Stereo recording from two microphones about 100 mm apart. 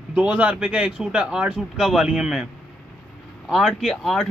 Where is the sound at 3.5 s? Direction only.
Centre (ahead or behind).